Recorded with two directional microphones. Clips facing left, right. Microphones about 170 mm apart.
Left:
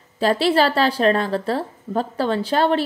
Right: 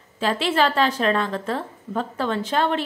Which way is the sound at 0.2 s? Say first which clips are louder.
Left 4 dB; 35° left (ahead or behind).